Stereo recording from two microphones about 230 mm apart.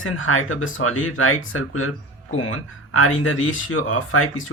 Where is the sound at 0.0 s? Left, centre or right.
Left.